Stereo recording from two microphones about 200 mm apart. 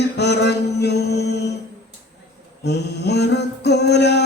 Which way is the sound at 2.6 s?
55° left (ahead or behind).